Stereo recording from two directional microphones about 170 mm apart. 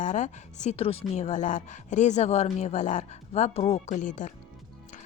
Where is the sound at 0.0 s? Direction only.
45° left (ahead or behind).